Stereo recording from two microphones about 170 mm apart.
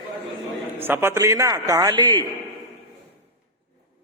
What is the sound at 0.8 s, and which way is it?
A man's voice, 15° right (ahead or behind).